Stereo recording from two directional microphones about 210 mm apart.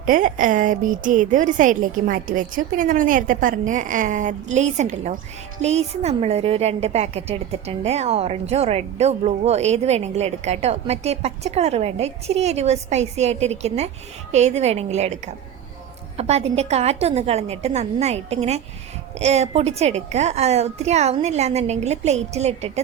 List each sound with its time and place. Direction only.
0.0 s a woman's voice: 40° right (ahead or behind)